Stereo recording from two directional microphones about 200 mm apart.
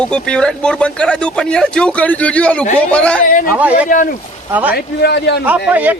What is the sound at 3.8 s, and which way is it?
Speech, 40° left (ahead or behind).